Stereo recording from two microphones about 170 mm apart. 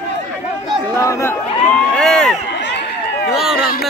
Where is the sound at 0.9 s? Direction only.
15° left (ahead or behind).